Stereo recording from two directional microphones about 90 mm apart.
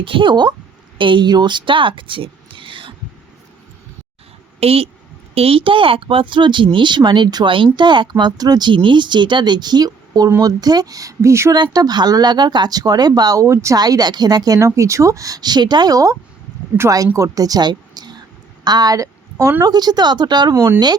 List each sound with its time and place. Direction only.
0.0 s speech: 75° right (ahead or behind)
4.6 s a woman's voice: 90° right; by 7.4 s 55° right (ahead or behind)
7.4 s speech: 70° right (ahead or behind); by 8.7 s 50° right (ahead or behind)
8.7 s speech: 65° right (ahead or behind); by 11.5 s 30° right (ahead or behind)
11.5 s a woman's voice: 50° right (ahead or behind); by 13.7 s 35° right (ahead or behind)
13.7 s a woman's voice: 50° right (ahead or behind)
17.2 s a woman's voice: 40° right (ahead or behind)
19.4 s a woman's voice: 30° right (ahead or behind)
19.6 s a woman's voice: 50° right (ahead or behind)